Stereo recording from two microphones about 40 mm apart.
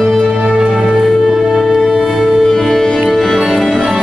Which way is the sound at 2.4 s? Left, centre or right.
Centre.